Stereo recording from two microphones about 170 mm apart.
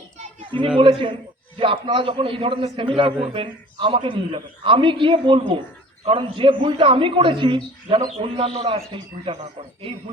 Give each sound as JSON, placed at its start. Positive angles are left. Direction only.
{"t": 0.8, "sound": "a man's voice", "side_deg": -35}